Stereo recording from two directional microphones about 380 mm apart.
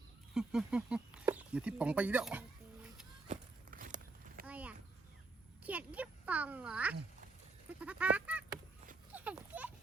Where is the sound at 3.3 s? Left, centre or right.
Right.